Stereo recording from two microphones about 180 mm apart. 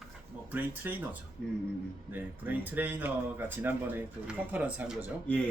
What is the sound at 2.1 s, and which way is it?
Speech, 10° right (ahead or behind).